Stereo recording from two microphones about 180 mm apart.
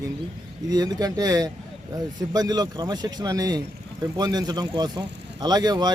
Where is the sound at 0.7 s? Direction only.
20° right (ahead or behind).